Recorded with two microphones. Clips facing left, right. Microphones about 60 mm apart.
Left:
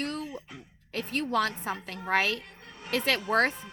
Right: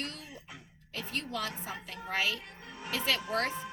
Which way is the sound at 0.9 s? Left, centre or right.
Left.